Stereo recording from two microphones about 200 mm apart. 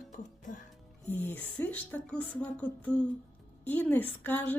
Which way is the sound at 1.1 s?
10° left (ahead or behind).